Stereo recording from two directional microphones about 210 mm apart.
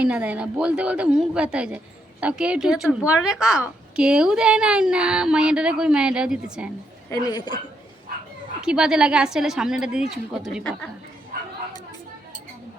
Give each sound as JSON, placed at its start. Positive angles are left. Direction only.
{"t": 0.0, "sound": "a woman's voice", "side_deg": -5}
{"t": 7.1, "sound": "a woman's voice", "side_deg": 20}
{"t": 8.6, "sound": "a woman's voice", "side_deg": -5}